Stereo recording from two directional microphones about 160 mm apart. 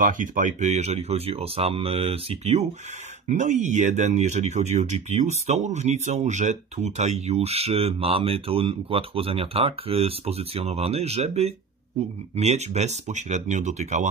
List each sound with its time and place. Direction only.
0.0 s speech: 55° right (ahead or behind)